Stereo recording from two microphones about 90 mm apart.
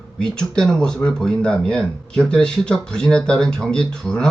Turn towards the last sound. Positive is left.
turn(degrees=10)  # may be behind; listen again after turning